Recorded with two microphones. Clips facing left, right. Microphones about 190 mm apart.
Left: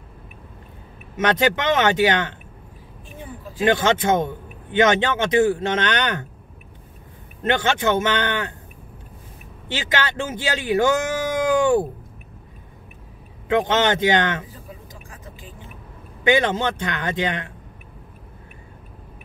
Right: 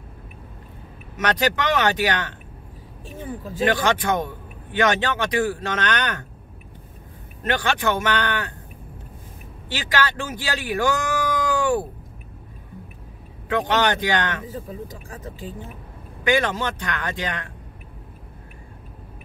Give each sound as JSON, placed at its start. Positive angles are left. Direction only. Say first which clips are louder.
{"t": 1.1, "sound": "a man's voice", "louder": "left 3 dB", "side_deg": 25}
{"t": 3.6, "sound": "a man's voice", "louder": "left 3 dB", "side_deg": 25}
{"t": 7.4, "sound": "a man's voice", "louder": "left 3 dB", "side_deg": 25}
{"t": 9.7, "sound": "speech", "louder": "even", "side_deg": 20}
{"t": 13.5, "sound": "a man's voice", "louder": "left 2 dB", "side_deg": 20}
{"t": 16.3, "sound": "a man's voice", "louder": "left 3 dB", "side_deg": 20}